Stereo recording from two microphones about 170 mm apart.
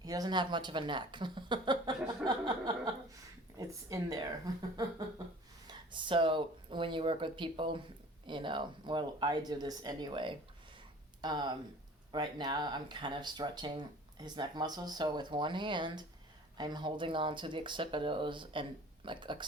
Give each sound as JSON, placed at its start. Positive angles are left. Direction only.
{"t": 0.0, "sound": "a woman's voice", "side_deg": -20}
{"t": 5.6, "sound": "speech", "side_deg": -30}